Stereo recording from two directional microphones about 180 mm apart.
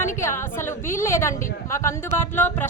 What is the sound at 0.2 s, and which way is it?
A woman's voice, 15° left (ahead or behind).